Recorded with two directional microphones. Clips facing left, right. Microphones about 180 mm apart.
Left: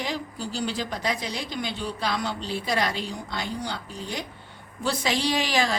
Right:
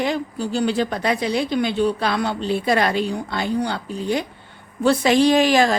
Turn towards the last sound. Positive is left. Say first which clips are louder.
# right 10 dB
turn(degrees=-50)  # may be behind; listen again after turning